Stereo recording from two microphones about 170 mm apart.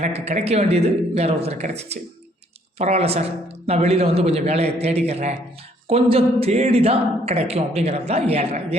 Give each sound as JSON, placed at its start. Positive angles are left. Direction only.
{"t": 0.0, "sound": "speech", "side_deg": -40}